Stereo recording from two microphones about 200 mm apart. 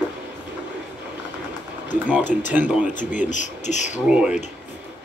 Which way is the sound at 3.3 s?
35° left (ahead or behind).